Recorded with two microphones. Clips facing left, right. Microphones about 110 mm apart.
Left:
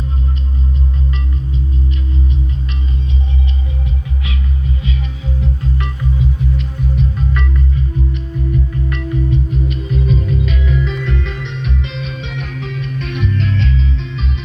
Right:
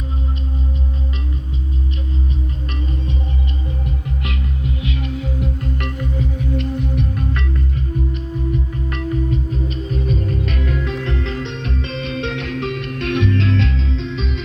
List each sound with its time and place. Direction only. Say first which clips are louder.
4.2 s music: left 1 dB; 60° right (ahead or behind)
8.9 s music: even; 35° right (ahead or behind); by 13.7 s 80° right